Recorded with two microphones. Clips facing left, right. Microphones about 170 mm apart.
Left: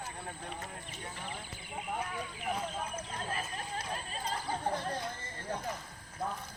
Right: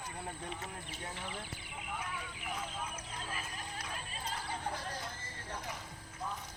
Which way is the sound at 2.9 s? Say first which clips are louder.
Left 5 dB; 35° left (ahead or behind).